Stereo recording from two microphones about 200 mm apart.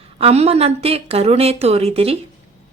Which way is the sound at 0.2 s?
30° right (ahead or behind).